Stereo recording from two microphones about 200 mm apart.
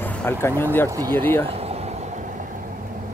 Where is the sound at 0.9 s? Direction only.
20° right (ahead or behind).